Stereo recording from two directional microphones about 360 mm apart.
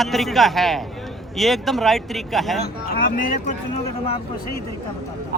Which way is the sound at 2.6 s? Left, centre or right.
Left.